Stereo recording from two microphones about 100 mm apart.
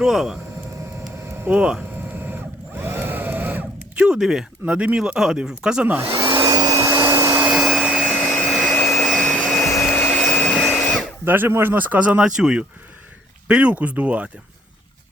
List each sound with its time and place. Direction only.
0.0 s speech: 5° right (ahead or behind)
1.3 s a sound: 25° right (ahead or behind)
1.5 s a sound: 15° right (ahead or behind)
6.4 s vacuum cleaner: 40° right (ahead or behind)
7.4 s vacuum cleaner: 5° right (ahead or behind)
7.9 s vacuum cleaner: 10° left (ahead or behind)
9.0 s vacuum cleaner: 10° left (ahead or behind)
10.7 s drill: 20° left (ahead or behind)
11.3 s speech: 20° right (ahead or behind)